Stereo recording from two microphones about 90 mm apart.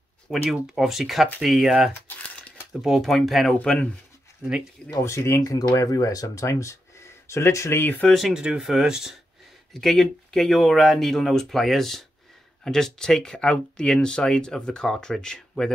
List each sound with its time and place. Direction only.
0.3 s speech: 5° right (ahead or behind)
2.0 s crumpling: 20° left (ahead or behind)
2.7 s speech: 5° right (ahead or behind)
3.5 s speech: 10° left (ahead or behind)
4.9 s speech: 35° left (ahead or behind)
8.0 s speech: centre (ahead or behind)
9.8 s speech: 5° left (ahead or behind)